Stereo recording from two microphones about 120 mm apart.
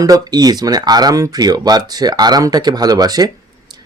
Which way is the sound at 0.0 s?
35° right (ahead or behind).